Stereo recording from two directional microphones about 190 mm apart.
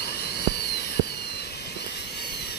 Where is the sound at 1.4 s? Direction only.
60° left (ahead or behind).